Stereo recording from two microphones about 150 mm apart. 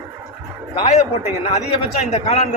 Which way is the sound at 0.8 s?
50° left (ahead or behind).